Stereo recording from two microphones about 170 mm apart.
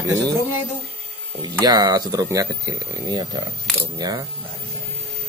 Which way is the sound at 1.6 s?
20° right (ahead or behind).